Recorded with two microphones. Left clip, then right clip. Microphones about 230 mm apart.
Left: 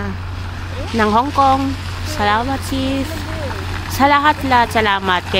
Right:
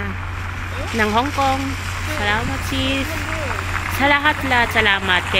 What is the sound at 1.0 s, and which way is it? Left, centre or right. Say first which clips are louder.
Speech: left 5 dB; centre.